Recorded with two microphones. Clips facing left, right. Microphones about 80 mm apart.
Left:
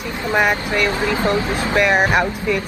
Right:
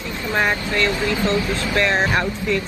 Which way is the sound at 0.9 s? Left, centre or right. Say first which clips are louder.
Left 2 dB; left.